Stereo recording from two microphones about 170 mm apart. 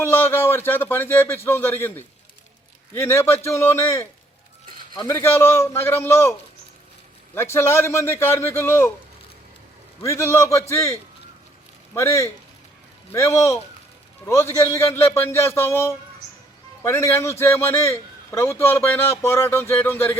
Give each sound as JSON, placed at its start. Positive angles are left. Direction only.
{"t": 0.0, "sound": "a man's voice", "side_deg": 15}
{"t": 7.3, "sound": "a man's voice", "side_deg": 15}
{"t": 10.0, "sound": "a man's voice", "side_deg": 15}
{"t": 11.9, "sound": "a man's voice", "side_deg": 15}